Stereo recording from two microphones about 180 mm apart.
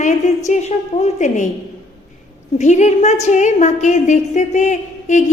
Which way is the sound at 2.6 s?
40° left (ahead or behind).